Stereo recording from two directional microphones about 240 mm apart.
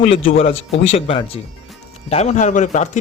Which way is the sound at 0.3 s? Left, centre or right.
Left.